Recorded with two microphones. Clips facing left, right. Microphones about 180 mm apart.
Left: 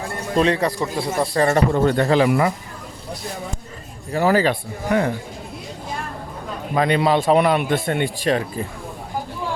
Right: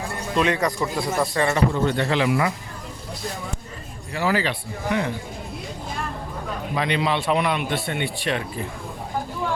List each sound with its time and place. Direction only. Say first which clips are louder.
0.3 s speech: left 3 dB; 30° left (ahead or behind)
1.5 s speech: left 4 dB; 45° left (ahead or behind)
4.1 s speech: left 6 dB; 45° left (ahead or behind)
6.7 s speech: left 6 dB; 45° left (ahead or behind)